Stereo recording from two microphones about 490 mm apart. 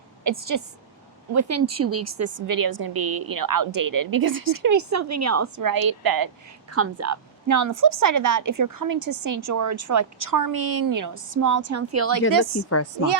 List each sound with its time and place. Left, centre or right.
0.3 s a woman's voice: right
2.6 s a woman's voice: right
6.7 s a woman's voice: right
12.7 s speech: left